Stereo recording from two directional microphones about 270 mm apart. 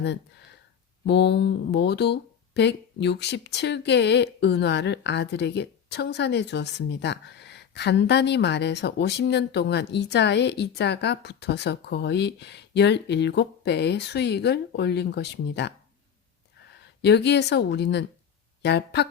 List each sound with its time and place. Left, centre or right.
1.0 s speech: left
17.0 s speech: left